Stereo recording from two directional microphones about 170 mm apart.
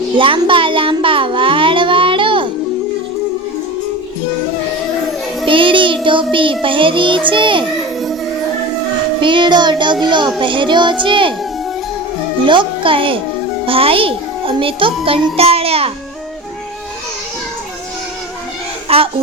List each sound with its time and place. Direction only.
0.2 s child singing: 30° right (ahead or behind)
5.5 s child singing: 30° right (ahead or behind)
9.2 s child singing: 30° right (ahead or behind)
12.5 s a child's voice: 30° right (ahead or behind)
18.9 s a child's voice: 35° right (ahead or behind)